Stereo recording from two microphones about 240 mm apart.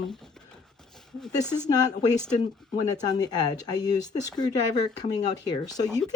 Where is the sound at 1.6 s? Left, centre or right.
Centre.